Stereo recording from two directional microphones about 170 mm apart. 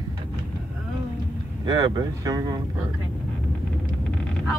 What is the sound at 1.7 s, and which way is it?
Speech, 25° right (ahead or behind).